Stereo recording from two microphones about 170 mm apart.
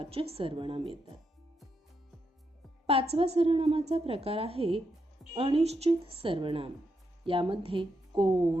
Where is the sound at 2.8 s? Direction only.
35° right (ahead or behind).